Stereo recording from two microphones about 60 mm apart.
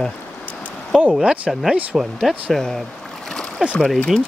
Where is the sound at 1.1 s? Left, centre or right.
Centre.